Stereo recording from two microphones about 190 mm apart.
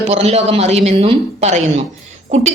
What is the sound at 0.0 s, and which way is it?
A woman's voice, 35° right (ahead or behind).